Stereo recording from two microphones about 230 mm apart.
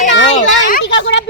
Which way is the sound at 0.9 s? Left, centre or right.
Left.